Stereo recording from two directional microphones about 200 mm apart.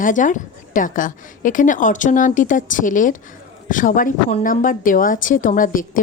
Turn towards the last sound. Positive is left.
turn(degrees=40)  # may be behind; listen again after turning